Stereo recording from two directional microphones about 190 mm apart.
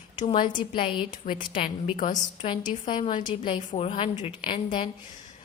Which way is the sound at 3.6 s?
35° left (ahead or behind).